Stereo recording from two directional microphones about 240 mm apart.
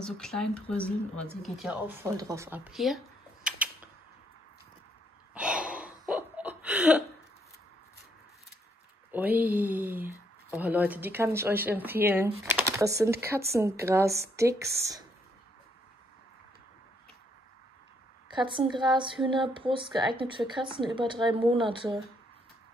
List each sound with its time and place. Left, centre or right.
0.0 s speech: centre
2.1 s speech: centre
3.4 s a sound: centre
5.3 s a sound: centre
9.4 s speech: centre
18.3 s speech: centre